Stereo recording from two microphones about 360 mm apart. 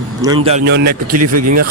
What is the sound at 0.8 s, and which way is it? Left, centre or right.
Speech, right.